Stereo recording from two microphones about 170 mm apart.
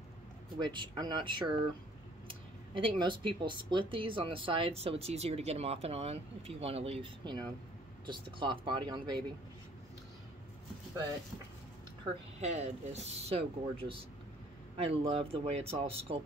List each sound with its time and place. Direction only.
0.6 s speech: 25° right (ahead or behind)
12.4 s speech: 40° right (ahead or behind)